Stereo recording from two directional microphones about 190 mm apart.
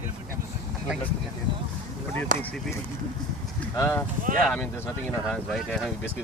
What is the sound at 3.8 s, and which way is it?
Speech, 15° left (ahead or behind).